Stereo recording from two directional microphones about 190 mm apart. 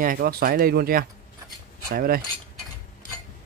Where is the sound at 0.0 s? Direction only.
50° right (ahead or behind).